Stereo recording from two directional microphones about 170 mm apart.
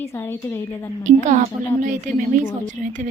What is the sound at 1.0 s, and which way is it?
A woman's voice, 45° right (ahead or behind).